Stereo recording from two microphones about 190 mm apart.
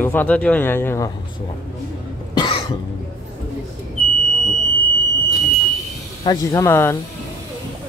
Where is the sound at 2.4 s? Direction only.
25° left (ahead or behind).